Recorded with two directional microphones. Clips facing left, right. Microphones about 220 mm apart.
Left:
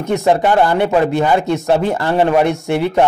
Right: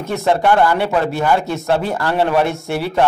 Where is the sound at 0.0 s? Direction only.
15° left (ahead or behind).